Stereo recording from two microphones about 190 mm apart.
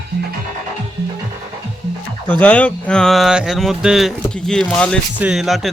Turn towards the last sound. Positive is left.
turn(degrees=0)  # may be behind; listen again after turning